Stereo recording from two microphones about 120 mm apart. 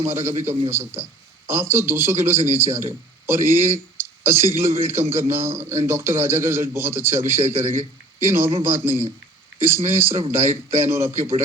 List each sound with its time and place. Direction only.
0.0 s speech: 20° right (ahead or behind)